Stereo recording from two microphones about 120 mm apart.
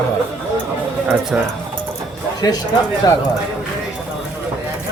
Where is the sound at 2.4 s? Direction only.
30° left (ahead or behind).